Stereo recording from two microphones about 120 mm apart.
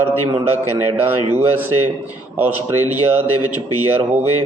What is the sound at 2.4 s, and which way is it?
Speech, 15° right (ahead or behind).